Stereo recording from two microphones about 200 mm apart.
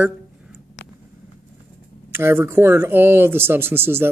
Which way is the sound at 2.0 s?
10° right (ahead or behind).